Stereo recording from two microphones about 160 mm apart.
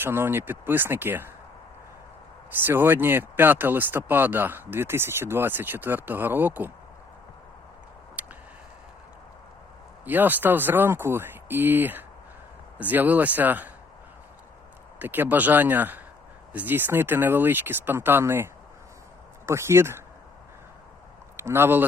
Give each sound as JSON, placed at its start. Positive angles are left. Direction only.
{"t": 0.0, "sound": "speech", "side_deg": -15}
{"t": 2.6, "sound": "speech", "side_deg": -15}
{"t": 8.2, "sound": "a sound", "side_deg": -10}
{"t": 10.1, "sound": "speech", "side_deg": -10}
{"t": 14.9, "sound": "speech", "side_deg": -10}
{"t": 19.5, "sound": "speech", "side_deg": -15}
{"t": 21.3, "sound": "speech", "side_deg": -15}